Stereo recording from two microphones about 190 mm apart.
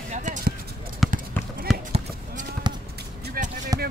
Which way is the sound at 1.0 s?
Centre (ahead or behind).